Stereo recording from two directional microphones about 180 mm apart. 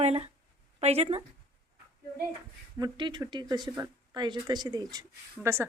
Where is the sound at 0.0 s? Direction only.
35° right (ahead or behind).